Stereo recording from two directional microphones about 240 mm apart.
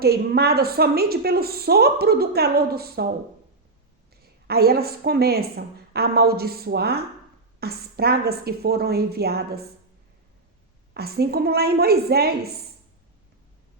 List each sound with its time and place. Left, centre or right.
0.0 s a woman's voice: right
4.1 s a woman's voice: right
10.9 s a woman's voice: right